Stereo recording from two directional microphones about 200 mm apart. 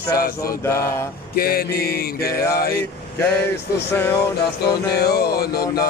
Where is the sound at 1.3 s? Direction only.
50° left (ahead or behind).